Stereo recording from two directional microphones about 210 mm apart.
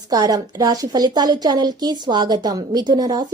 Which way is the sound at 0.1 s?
15° right (ahead or behind).